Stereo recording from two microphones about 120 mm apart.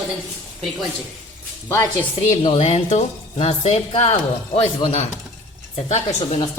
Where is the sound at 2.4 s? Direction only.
50° left (ahead or behind); by 6.4 s 65° left (ahead or behind).